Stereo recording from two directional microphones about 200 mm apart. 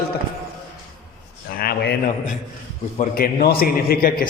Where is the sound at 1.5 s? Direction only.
50° left (ahead or behind).